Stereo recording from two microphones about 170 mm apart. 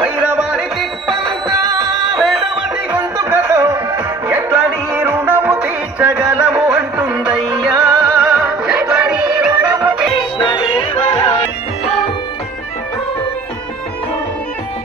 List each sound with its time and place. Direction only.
0.0 s music: 5° right (ahead or behind)
2.1 s music: centre (ahead or behind)
2.9 s music: 15° right (ahead or behind)
7.7 s music: 15° right (ahead or behind)
8.5 s music: 5° right (ahead or behind)
10.4 s music: 30° left (ahead or behind)